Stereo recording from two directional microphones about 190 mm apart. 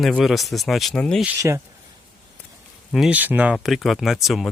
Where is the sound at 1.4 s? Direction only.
15° right (ahead or behind).